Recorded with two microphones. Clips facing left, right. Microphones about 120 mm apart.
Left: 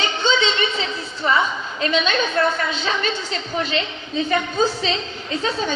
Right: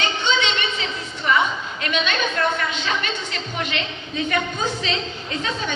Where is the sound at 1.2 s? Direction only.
35° left (ahead or behind).